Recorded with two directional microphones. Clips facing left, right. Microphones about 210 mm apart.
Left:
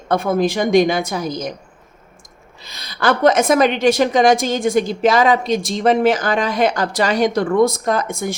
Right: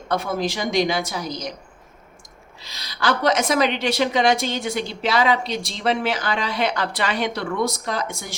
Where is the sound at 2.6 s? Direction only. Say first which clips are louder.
Left 5 dB; 55° left (ahead or behind).